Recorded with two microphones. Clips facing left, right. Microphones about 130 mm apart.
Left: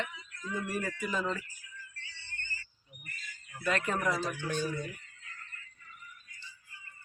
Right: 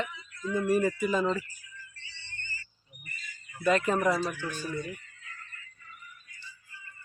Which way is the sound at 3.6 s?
5° right (ahead or behind).